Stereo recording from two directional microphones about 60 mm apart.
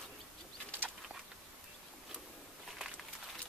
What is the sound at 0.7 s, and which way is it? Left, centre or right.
Bird, right.